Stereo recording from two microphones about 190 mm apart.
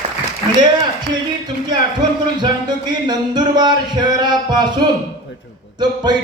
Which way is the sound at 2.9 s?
20° right (ahead or behind).